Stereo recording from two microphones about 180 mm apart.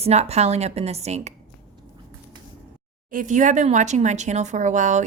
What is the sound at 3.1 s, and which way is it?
Speech, 45° right (ahead or behind).